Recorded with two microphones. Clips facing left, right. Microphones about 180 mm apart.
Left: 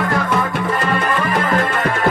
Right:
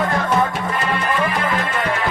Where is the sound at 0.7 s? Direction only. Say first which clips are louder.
Even; 45° left (ahead or behind).